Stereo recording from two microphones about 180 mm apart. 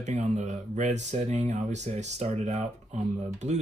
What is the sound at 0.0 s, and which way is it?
Speech, 40° right (ahead or behind).